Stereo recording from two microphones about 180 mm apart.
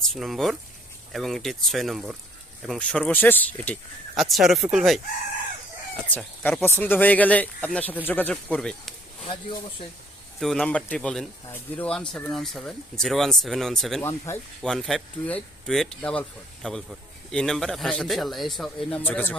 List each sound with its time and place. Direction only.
0.1 s a man's voice: centre (ahead or behind)
6.1 s a man's voice: 10° left (ahead or behind)
10.4 s a man's voice: 5° left (ahead or behind)
14.0 s speech: 15° left (ahead or behind)
14.6 s a man's voice: 5° left (ahead or behind)